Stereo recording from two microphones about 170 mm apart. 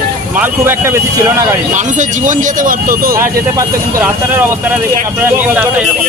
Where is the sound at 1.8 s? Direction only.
50° right (ahead or behind).